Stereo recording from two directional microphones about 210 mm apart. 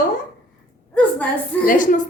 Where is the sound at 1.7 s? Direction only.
40° left (ahead or behind).